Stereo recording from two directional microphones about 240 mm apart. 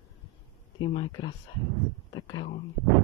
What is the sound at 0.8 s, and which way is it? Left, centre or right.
Speech, centre.